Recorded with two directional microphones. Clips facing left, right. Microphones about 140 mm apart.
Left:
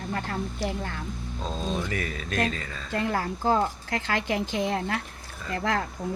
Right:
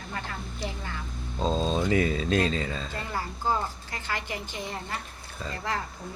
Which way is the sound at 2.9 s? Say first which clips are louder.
Left 6 dB; 70° left (ahead or behind).